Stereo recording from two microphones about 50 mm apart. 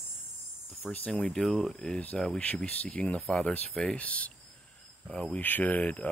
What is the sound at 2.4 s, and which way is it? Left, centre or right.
Speech, left.